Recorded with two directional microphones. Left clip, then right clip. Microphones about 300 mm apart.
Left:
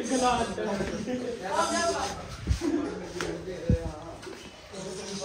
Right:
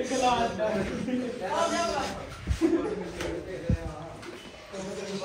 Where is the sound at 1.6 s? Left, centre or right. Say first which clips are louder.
Left 1 dB; centre.